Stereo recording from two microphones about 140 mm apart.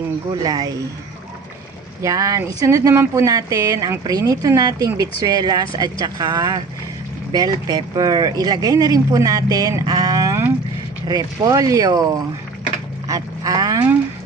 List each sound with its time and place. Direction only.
0.4 s speech: 25° right (ahead or behind)
2.0 s speech: 25° right (ahead or behind)
13.1 s a sound: 25° right (ahead or behind)